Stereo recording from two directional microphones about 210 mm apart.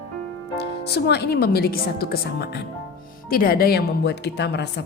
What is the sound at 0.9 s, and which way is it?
Speech, 50° left (ahead or behind).